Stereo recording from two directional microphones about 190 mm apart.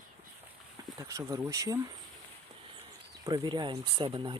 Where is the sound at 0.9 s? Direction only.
15° right (ahead or behind).